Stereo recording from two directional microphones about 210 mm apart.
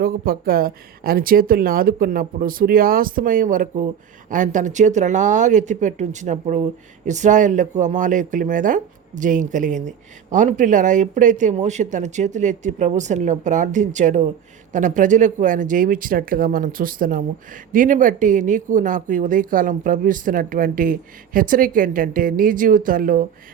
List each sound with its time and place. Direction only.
0.0 s speech: 45° right (ahead or behind)